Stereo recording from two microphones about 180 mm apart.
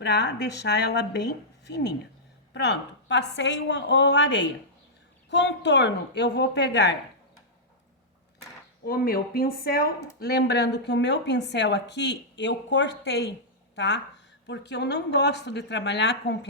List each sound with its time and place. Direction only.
0.0 s a woman's voice: 70° left (ahead or behind)
8.8 s speech: 55° left (ahead or behind); by 13.2 s 90° left
13.7 s speech: 75° left (ahead or behind)